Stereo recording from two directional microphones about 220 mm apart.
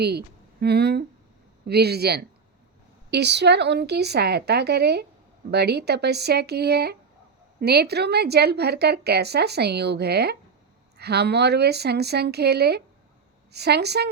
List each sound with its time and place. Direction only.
0.0 s a woman's voice: 45° right (ahead or behind)